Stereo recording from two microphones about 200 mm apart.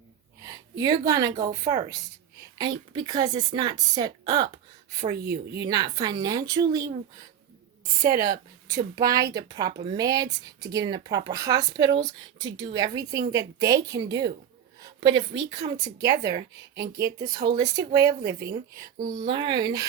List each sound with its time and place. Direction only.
0.4 s a sound: 20° right (ahead or behind)
1.0 s a woman's voice: 15° right (ahead or behind)
5.1 s a woman's voice: 55° right (ahead or behind)
5.6 s speech: 20° right (ahead or behind)
8.1 s a woman's voice: 50° right (ahead or behind)
8.6 s a woman's voice: 15° right (ahead or behind)
14.8 s a sound: 20° right (ahead or behind)
15.8 s a woman's voice: 15° right (ahead or behind)
17.2 s a woman's voice: 50° right (ahead or behind)
17.5 s a woman's voice: 20° right (ahead or behind)
18.8 s a woman's voice: 45° right (ahead or behind)
19.1 s speech: 20° right (ahead or behind)